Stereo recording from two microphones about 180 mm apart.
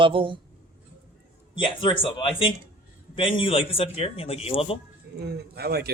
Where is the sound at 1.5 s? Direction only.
25° left (ahead or behind).